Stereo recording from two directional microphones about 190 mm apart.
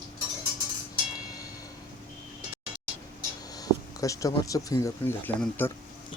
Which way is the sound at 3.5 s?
20° left (ahead or behind).